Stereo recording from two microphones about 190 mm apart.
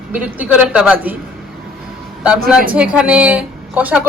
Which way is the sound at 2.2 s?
5° right (ahead or behind).